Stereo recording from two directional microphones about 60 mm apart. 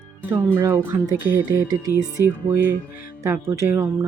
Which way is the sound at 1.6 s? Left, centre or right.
Right.